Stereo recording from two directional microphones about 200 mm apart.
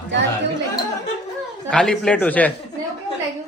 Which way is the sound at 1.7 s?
5° left (ahead or behind).